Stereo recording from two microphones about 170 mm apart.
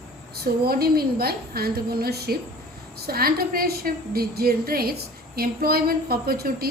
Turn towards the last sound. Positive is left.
turn(degrees=-65)  # may be behind; listen again after turning